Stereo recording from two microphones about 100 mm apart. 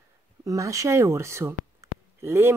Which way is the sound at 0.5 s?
35° right (ahead or behind).